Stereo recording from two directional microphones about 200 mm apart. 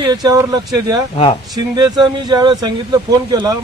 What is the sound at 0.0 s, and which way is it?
Speech, 20° right (ahead or behind).